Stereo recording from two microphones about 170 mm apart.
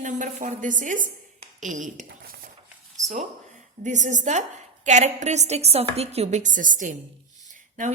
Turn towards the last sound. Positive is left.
turn(degrees=-45)  # may be behind; listen again after turning